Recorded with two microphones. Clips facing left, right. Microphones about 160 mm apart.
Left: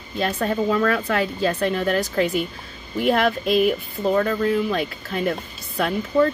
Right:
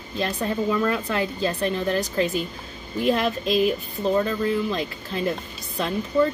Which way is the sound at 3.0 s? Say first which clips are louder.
Left 3 dB; 70° left (ahead or behind).